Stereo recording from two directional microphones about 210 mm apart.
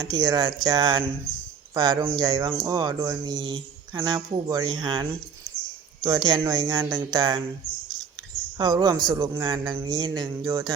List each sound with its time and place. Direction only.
0.0 s speech: 20° right (ahead or behind)
8.5 s speech: 20° right (ahead or behind)